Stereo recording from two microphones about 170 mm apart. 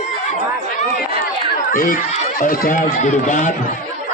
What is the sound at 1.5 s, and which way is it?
Chatter, 55° left (ahead or behind).